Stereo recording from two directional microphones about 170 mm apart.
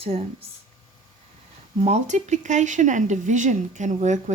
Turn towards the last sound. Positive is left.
turn(degrees=-45)  # may be behind; listen again after turning